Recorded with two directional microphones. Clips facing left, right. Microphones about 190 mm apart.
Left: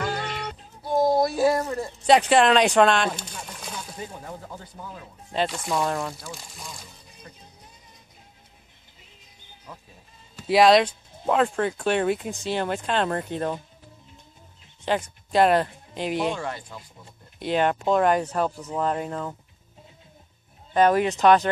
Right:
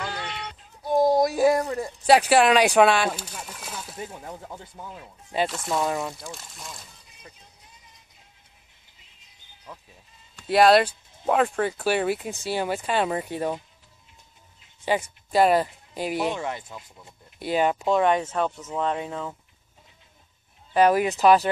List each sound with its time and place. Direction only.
0.0 s music: 45° left (ahead or behind)
0.8 s speech: 15° right (ahead or behind)
5.3 s speech: 5° right (ahead or behind)
10.3 s speech: centre (ahead or behind)
14.9 s speech: 5° right (ahead or behind)
16.3 s speech: 20° right (ahead or behind)
17.4 s speech: 5° right (ahead or behind)
20.7 s speech: 10° right (ahead or behind)